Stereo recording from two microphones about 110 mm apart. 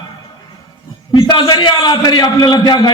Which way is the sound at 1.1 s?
40° left (ahead or behind).